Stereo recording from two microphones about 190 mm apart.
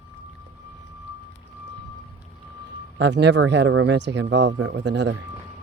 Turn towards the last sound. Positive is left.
turn(degrees=-65)  # may be behind; listen again after turning